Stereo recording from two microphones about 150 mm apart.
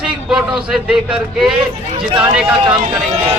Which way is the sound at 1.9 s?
35° right (ahead or behind).